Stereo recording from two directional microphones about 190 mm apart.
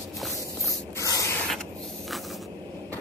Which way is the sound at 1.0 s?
15° left (ahead or behind).